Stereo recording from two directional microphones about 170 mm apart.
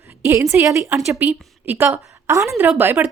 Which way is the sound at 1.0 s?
5° right (ahead or behind).